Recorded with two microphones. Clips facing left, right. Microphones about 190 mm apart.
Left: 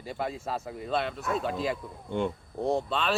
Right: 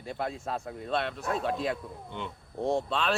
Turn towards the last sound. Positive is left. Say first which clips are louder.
# left 1 dB
turn(degrees=0)  # may be behind; listen again after turning